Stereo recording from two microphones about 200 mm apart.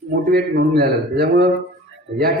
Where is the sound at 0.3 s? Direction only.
55° right (ahead or behind).